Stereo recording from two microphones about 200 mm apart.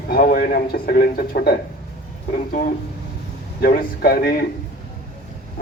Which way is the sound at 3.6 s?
50° left (ahead or behind).